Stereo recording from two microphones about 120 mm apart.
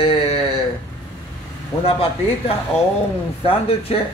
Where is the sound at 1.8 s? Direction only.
50° left (ahead or behind).